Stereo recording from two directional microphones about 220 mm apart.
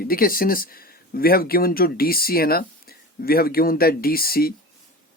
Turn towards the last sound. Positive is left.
turn(degrees=45)  # may be behind; listen again after turning